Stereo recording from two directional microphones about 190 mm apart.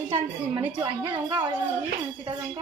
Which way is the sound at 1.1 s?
25° right (ahead or behind).